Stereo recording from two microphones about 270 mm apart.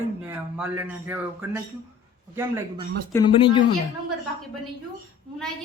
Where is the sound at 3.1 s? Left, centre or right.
Centre.